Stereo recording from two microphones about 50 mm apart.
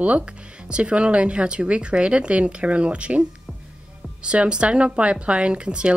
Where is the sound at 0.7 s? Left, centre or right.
Right.